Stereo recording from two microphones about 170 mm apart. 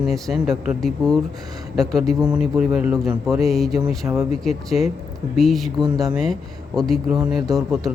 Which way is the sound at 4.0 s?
20° right (ahead or behind).